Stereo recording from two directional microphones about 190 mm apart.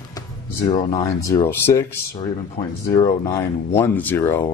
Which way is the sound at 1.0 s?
15° left (ahead or behind).